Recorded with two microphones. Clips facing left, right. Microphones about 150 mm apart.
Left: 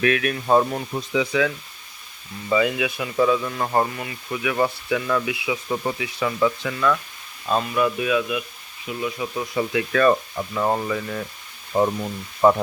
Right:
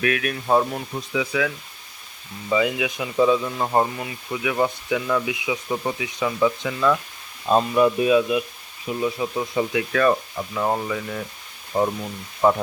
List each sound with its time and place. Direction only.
0.0 s speech: 5° right (ahead or behind)
5.6 s speech: 5° right (ahead or behind)
6.0 s speech: 15° right (ahead or behind)
7.4 s speech: 30° right (ahead or behind)
9.0 s speech: 20° right (ahead or behind)
9.9 s speech: centre (ahead or behind)